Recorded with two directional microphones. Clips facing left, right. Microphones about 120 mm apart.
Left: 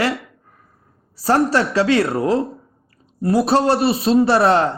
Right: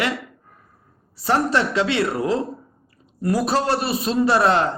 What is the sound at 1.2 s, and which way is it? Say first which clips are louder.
Speech: left 3 dB; 35° left (ahead or behind).